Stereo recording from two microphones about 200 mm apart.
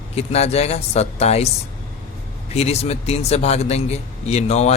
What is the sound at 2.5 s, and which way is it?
Speech, 30° left (ahead or behind).